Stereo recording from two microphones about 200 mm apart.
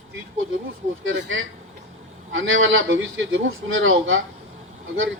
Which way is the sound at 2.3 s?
75° right (ahead or behind).